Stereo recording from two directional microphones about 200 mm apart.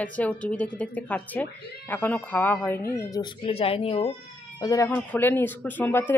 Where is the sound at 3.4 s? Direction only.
30° left (ahead or behind).